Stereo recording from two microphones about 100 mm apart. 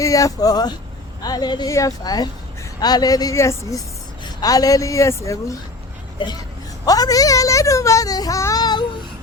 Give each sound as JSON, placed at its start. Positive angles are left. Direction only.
{"t": 0.0, "sound": "speech", "side_deg": 35}
{"t": 6.8, "sound": "speech", "side_deg": 40}